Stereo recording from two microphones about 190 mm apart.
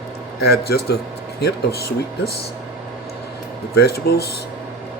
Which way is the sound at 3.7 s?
55° left (ahead or behind).